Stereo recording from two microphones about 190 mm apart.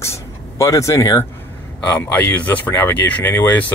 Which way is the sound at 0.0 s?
15° left (ahead or behind).